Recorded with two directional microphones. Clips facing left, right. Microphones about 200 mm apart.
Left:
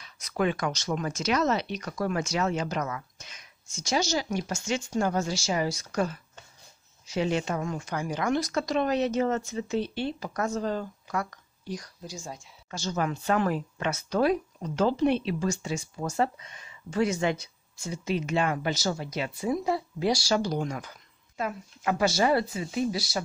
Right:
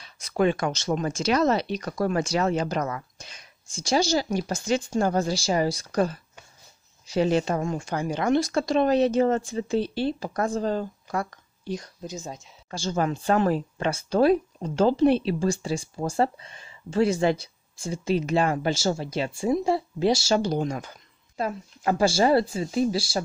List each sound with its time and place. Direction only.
0.0 s speech: 30° right (ahead or behind)